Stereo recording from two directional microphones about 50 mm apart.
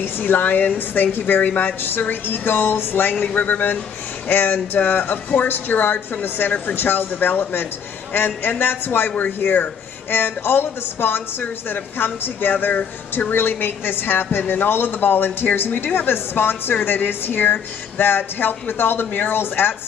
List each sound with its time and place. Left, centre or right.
0.0 s a woman's voice: left